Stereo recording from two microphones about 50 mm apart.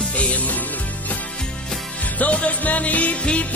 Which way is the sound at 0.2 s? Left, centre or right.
Left.